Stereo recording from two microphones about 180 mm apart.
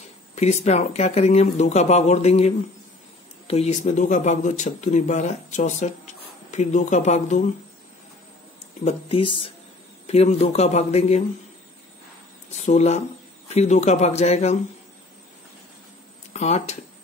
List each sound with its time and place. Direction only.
0.4 s speech: 40° left (ahead or behind)
8.8 s speech: 30° left (ahead or behind)
12.6 s speech: 40° left (ahead or behind)
16.3 s speech: 40° left (ahead or behind)